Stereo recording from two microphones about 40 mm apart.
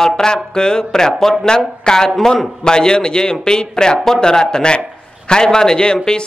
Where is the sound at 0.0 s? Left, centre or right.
Centre.